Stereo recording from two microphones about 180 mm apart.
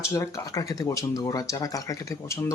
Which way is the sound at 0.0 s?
15° left (ahead or behind).